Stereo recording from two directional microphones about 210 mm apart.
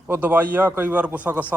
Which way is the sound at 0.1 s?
10° right (ahead or behind).